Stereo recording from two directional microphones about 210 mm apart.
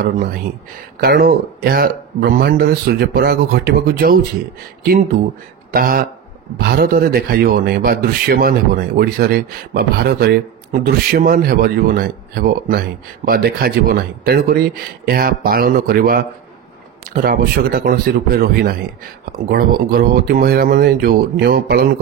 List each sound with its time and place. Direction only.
1.0 s speech: 50° right (ahead or behind)
5.7 s speech: 45° right (ahead or behind)